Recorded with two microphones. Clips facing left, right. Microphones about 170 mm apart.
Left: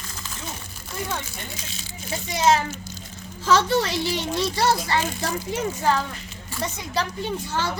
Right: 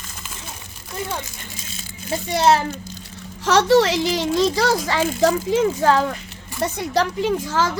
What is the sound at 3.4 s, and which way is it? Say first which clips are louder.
A child's voice: right 5 dB; 80° right.